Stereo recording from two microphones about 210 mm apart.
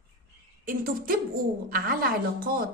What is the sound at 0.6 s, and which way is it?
A woman's voice, 45° right (ahead or behind).